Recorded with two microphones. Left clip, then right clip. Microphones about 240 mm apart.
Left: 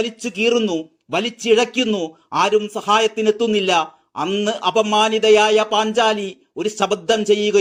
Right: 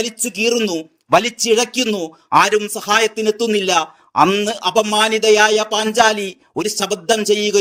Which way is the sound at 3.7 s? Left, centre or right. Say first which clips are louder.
Right 6 dB; right.